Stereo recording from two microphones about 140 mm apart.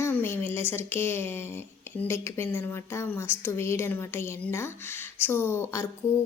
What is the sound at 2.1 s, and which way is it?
A woman's voice, 20° left (ahead or behind).